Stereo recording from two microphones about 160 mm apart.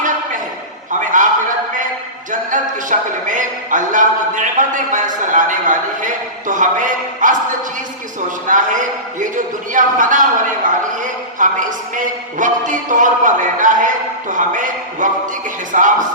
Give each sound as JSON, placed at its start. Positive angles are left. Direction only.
{"t": 0.9, "sound": "a sound", "side_deg": -55}
{"t": 2.5, "sound": "speech", "side_deg": -55}
{"t": 8.4, "sound": "a man's voice", "side_deg": -55}